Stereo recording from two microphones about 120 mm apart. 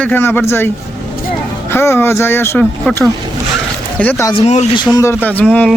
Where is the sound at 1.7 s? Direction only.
20° left (ahead or behind).